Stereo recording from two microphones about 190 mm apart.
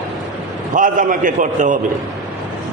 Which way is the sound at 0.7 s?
45° right (ahead or behind).